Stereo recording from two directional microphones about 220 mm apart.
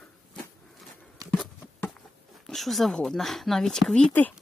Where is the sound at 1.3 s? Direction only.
5° left (ahead or behind).